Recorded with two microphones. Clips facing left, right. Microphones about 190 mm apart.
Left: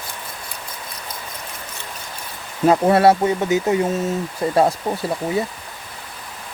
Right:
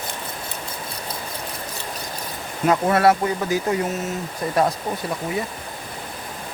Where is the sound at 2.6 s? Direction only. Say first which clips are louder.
Left 4 dB; 30° left (ahead or behind).